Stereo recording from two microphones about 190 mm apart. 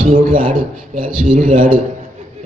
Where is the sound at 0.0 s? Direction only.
45° right (ahead or behind).